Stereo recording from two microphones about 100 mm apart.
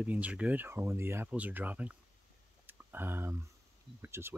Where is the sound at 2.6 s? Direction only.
20° right (ahead or behind).